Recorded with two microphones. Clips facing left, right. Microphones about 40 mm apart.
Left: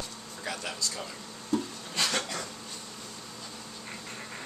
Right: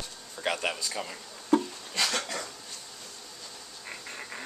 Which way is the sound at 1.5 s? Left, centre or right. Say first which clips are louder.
Right 5 dB; right.